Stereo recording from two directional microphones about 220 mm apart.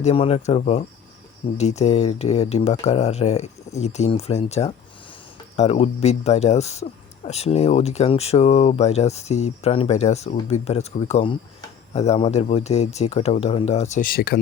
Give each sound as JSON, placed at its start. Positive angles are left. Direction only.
{"t": 0.0, "sound": "speech", "side_deg": 25}